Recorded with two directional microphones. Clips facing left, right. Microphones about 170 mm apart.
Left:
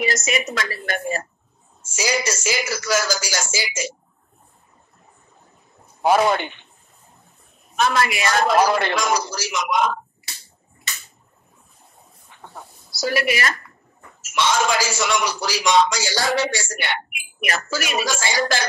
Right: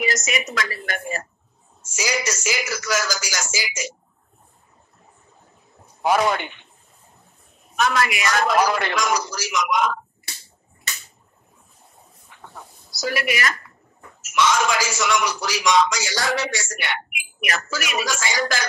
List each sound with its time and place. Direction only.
0.0 s a man's voice: 30° left (ahead or behind)
1.8 s music: 30° left (ahead or behind)
6.0 s a man's voice: 30° left (ahead or behind)
7.7 s a man's voice: 30° left (ahead or behind)
12.3 s a sound: 30° left (ahead or behind)
12.9 s a man's voice: 30° left (ahead or behind)